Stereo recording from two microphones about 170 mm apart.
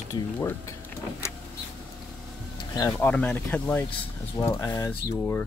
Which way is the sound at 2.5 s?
20° left (ahead or behind).